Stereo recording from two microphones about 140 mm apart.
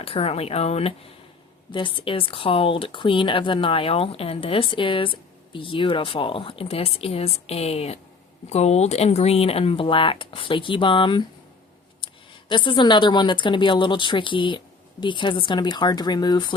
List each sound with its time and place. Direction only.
0.0 s speech: 40° left (ahead or behind)